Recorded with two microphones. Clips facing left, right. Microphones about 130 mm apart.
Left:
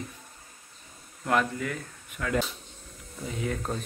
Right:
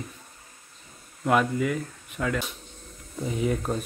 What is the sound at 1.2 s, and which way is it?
Speech, 10° right (ahead or behind).